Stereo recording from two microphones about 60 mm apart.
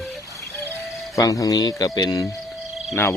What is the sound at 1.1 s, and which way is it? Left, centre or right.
Speech, left.